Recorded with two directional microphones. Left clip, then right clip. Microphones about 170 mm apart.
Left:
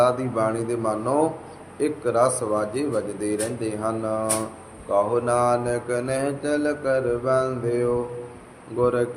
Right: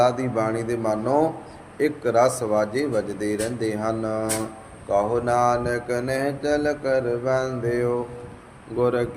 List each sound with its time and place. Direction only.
0.0 s mantra: 40° right (ahead or behind)